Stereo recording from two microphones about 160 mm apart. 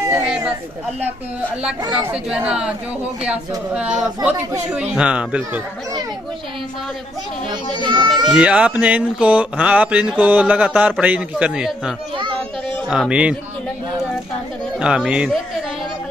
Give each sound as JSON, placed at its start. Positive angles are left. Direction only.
{"t": 0.1, "sound": "chatter", "side_deg": -5}
{"t": 2.2, "sound": "speech", "side_deg": -5}
{"t": 7.4, "sound": "a child's voice", "side_deg": -30}
{"t": 8.3, "sound": "speech", "side_deg": -5}
{"t": 14.8, "sound": "speech", "side_deg": -5}